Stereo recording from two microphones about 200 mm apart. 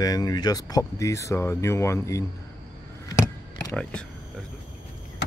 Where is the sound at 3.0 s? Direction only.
15° left (ahead or behind).